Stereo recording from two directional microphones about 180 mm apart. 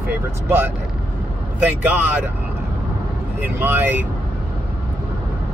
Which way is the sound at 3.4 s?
10° right (ahead or behind).